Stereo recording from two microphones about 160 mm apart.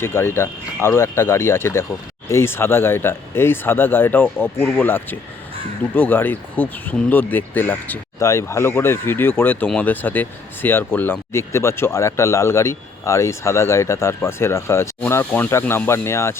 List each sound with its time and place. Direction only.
0.0 s speech: 15° left (ahead or behind)